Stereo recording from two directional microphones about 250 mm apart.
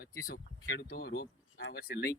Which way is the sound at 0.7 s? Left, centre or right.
Left.